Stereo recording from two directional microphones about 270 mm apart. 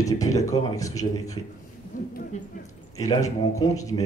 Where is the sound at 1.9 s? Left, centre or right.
Left.